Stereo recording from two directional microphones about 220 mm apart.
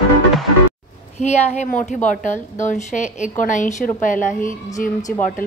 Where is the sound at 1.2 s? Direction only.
30° left (ahead or behind).